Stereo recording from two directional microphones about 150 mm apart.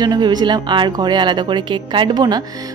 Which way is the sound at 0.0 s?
30° right (ahead or behind).